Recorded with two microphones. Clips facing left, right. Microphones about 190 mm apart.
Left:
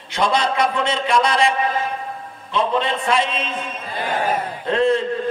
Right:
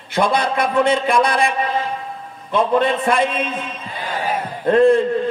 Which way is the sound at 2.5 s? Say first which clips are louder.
Right 4 dB; 55° right (ahead or behind).